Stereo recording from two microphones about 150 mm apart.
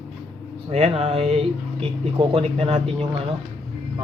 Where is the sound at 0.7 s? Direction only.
45° right (ahead or behind).